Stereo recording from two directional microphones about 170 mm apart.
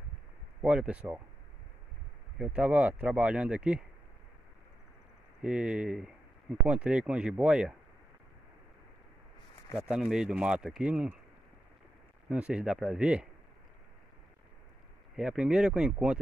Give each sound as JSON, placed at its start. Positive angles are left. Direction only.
{"t": 0.6, "sound": "speech", "side_deg": -5}
{"t": 2.3, "sound": "speech", "side_deg": -5}
{"t": 5.4, "sound": "speech", "side_deg": -5}
{"t": 9.8, "sound": "speech", "side_deg": -5}
{"t": 12.3, "sound": "speech", "side_deg": -5}
{"t": 15.1, "sound": "speech", "side_deg": -5}